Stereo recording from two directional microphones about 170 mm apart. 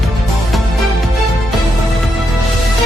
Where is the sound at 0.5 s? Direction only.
Centre (ahead or behind).